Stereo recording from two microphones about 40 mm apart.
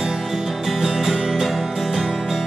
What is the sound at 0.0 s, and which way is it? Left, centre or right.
Music, centre.